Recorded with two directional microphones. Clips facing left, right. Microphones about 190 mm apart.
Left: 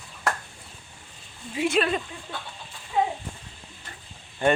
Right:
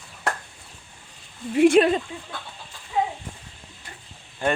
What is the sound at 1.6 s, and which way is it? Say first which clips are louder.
Speech: right 9 dB; 60° right (ahead or behind).